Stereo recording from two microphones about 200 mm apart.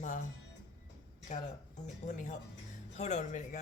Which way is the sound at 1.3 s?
35° left (ahead or behind).